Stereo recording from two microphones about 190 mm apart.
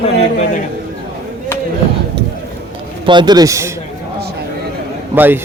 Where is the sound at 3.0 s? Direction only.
25° right (ahead or behind).